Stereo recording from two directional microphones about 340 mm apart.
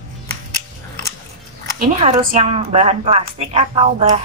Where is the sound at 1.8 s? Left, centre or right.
Centre.